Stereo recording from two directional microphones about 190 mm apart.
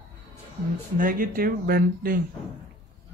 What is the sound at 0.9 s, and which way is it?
Speech, 45° right (ahead or behind).